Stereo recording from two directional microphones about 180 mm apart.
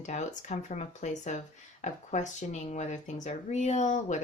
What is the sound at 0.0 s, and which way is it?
Speech, 40° left (ahead or behind).